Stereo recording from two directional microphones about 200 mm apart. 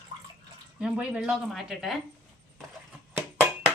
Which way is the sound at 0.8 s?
5° right (ahead or behind).